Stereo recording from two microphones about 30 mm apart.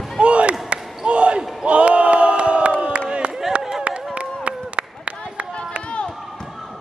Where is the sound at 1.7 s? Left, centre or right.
Right.